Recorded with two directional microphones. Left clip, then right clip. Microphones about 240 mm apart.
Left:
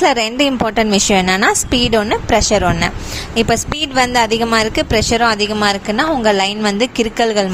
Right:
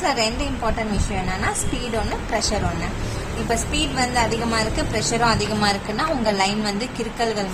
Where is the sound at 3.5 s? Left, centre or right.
Left.